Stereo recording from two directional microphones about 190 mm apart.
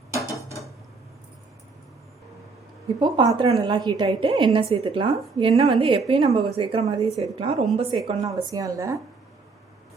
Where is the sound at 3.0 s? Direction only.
25° right (ahead or behind).